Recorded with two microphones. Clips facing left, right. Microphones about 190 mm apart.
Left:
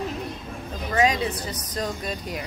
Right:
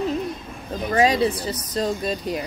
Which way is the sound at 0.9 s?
35° right (ahead or behind).